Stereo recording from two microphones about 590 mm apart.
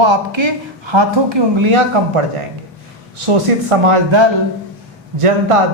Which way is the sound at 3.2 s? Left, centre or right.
Right.